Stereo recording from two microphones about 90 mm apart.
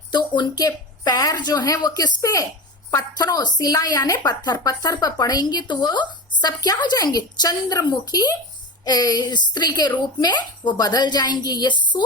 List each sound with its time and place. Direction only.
0.1 s a woman's voice: 55° left (ahead or behind)